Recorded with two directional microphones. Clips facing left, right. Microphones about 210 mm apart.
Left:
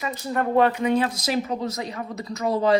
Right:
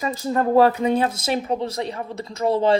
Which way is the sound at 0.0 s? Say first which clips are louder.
Right 4 dB; 30° right (ahead or behind).